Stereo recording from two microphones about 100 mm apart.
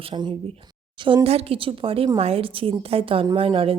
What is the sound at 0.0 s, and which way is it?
Speech, 50° right (ahead or behind).